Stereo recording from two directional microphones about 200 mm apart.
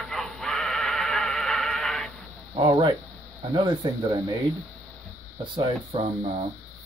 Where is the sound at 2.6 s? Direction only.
25° right (ahead or behind).